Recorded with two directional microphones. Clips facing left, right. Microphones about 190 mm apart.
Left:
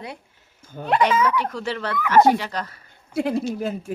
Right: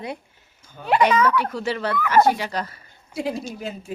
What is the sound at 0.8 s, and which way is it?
A woman's voice, 5° right (ahead or behind).